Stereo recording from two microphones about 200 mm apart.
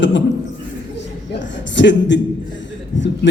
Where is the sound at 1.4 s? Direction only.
65° left (ahead or behind).